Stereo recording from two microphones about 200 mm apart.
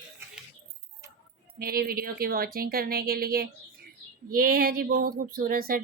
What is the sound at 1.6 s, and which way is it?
Speech, 50° right (ahead or behind).